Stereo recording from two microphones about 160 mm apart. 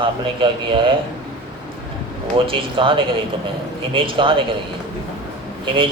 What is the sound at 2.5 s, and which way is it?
A man's voice, 35° right (ahead or behind).